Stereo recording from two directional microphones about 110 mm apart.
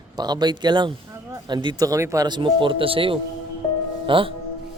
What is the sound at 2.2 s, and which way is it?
Speech, 45° right (ahead or behind).